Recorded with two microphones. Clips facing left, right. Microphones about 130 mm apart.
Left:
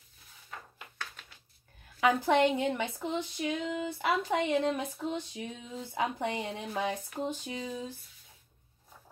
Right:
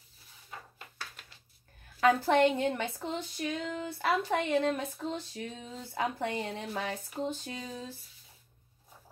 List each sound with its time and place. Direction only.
2.0 s a woman's voice: 15° left (ahead or behind)